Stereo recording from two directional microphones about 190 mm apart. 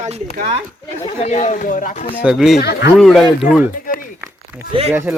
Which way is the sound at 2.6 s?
60° left (ahead or behind).